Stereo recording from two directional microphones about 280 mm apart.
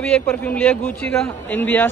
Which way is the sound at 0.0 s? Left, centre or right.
Centre.